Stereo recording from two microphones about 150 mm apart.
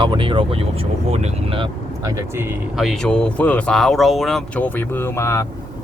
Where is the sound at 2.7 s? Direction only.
Centre (ahead or behind).